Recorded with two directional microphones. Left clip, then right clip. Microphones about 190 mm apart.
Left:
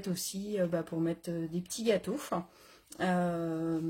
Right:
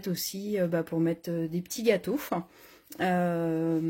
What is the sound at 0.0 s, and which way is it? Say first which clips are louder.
Speech: right 4 dB; 40° right (ahead or behind).